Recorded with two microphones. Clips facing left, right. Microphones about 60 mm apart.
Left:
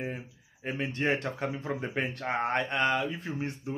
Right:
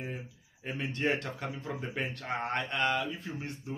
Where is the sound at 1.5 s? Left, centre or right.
Left.